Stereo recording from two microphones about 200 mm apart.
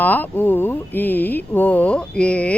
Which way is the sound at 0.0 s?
10° left (ahead or behind).